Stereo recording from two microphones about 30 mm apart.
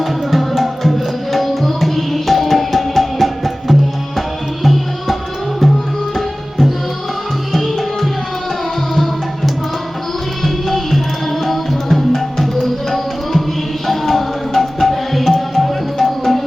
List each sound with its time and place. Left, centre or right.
0.0 s tabla: centre
4.6 s music: centre
6.1 s tabla: centre
7.5 s music: centre
10.4 s music: centre